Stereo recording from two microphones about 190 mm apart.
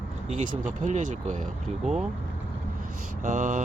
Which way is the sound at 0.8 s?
40° right (ahead or behind).